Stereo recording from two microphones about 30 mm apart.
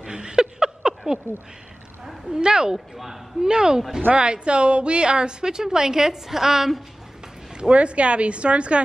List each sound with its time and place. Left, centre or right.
0.0 s a sound: right
2.3 s a woman's voice: right
7.7 s a woman's voice: right